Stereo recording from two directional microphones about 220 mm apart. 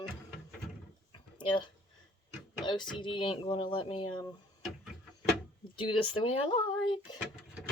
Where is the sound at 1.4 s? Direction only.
20° left (ahead or behind).